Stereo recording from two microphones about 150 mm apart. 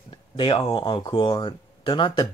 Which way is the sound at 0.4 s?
35° left (ahead or behind).